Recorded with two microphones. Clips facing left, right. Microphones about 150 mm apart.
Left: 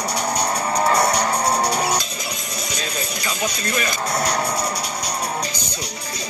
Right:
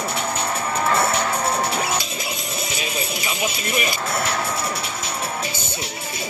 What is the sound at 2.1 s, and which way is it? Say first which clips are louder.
Music: right 1 dB; 25° right (ahead or behind).